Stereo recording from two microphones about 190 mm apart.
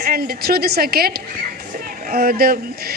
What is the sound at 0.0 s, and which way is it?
A woman's voice, 50° right (ahead or behind).